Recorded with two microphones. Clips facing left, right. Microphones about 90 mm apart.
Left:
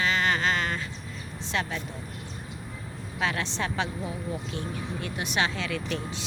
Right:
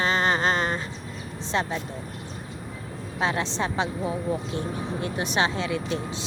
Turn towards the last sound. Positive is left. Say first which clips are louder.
# right 3 dB
turn(degrees=-20)  # may be behind; listen again after turning